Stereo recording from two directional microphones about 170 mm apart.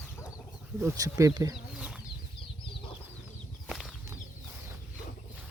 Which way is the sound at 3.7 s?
Centre (ahead or behind).